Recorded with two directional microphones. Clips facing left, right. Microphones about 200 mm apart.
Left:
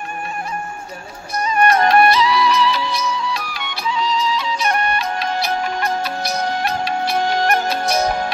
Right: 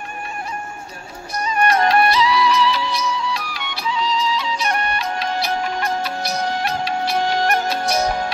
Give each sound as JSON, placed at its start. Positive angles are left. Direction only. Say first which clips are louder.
{"t": 1.4, "sound": "music", "louder": "left 2 dB", "side_deg": 50}